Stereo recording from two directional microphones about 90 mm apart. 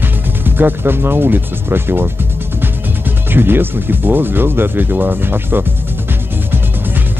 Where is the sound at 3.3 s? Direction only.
25° right (ahead or behind).